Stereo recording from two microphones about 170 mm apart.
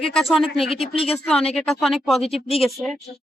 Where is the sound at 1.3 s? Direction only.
5° left (ahead or behind).